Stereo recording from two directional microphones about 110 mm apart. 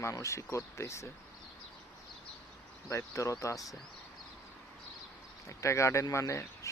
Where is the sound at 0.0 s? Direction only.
25° left (ahead or behind).